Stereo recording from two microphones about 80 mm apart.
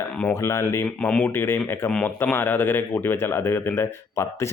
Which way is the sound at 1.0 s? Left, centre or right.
Centre.